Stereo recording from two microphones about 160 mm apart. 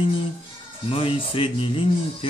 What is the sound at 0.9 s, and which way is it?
Speech, 35° left (ahead or behind).